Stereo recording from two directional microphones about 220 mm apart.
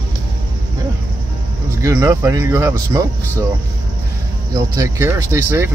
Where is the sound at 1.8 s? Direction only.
15° right (ahead or behind).